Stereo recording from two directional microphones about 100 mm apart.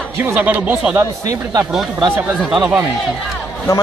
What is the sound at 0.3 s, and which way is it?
Speech, 15° right (ahead or behind).